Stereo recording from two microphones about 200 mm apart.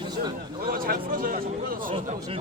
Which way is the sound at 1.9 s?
30° right (ahead or behind).